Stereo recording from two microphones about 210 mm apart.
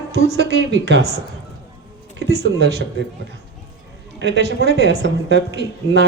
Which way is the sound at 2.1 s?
55° right (ahead or behind).